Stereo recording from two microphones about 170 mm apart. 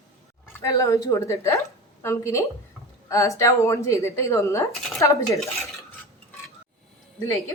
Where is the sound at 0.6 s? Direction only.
20° left (ahead or behind).